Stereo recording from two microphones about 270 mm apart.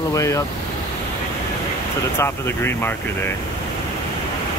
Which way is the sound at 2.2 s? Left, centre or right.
Centre.